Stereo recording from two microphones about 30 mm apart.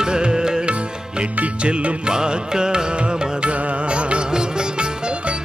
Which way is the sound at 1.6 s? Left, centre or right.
Right.